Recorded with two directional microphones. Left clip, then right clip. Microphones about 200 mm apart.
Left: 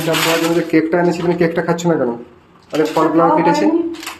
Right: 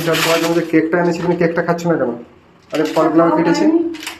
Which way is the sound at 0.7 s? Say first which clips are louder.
Even; 20° left (ahead or behind).